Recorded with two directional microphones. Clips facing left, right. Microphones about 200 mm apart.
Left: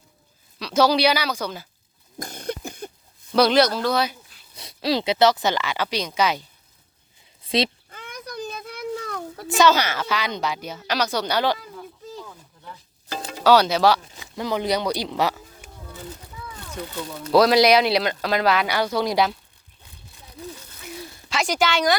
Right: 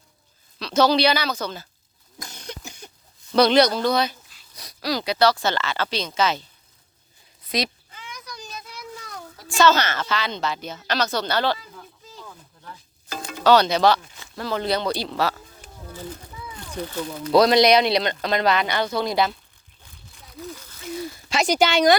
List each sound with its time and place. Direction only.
0.6 s a woman's voice: 10° left (ahead or behind)
2.1 s cough: 55° left (ahead or behind)
3.3 s speech: 5° left (ahead or behind)
4.5 s a woman's voice: 25° left (ahead or behind)
7.4 s a sound: 30° left (ahead or behind)
7.9 s a sound: 55° left (ahead or behind)
9.6 s a woman's voice: 10° left (ahead or behind)
13.1 s music: 30° left (ahead or behind)
13.4 s a woman's voice: 10° left (ahead or behind)
17.3 s speech: 5° left (ahead or behind)
20.2 s a sound: 25° left (ahead or behind)
21.4 s a woman's voice: 20° right (ahead or behind)